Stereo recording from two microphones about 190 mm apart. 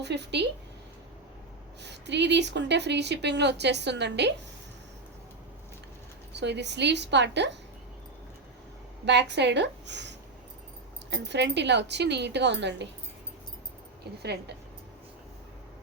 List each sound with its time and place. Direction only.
0.0 s speech: 65° right (ahead or behind)
1.8 s speech: 65° right (ahead or behind)
6.3 s speech: 65° right (ahead or behind)
9.0 s speech: 65° right (ahead or behind)
14.2 s speech: 60° right (ahead or behind)